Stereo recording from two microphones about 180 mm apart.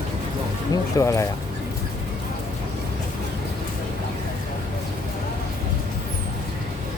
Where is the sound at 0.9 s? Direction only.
15° left (ahead or behind).